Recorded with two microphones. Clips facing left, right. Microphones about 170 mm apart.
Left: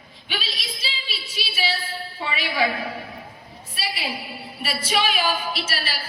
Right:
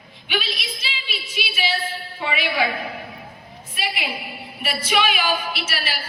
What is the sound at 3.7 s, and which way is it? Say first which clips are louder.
A woman's voice: right 2 dB; 35° left (ahead or behind).